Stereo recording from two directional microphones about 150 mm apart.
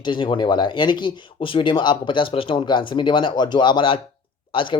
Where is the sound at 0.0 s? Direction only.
30° left (ahead or behind).